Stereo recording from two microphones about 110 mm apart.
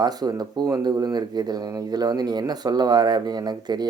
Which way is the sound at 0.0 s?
40° right (ahead or behind).